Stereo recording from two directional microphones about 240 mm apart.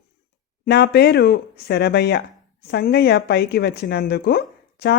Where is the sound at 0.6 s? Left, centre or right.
Left.